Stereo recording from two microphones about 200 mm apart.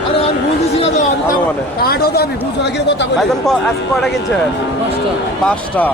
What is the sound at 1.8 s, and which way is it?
Speech, 50° left (ahead or behind).